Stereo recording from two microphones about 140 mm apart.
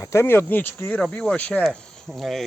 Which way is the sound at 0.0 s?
20° left (ahead or behind).